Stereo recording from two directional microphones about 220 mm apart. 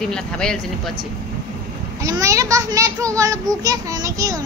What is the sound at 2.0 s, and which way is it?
A woman's voice, 15° right (ahead or behind).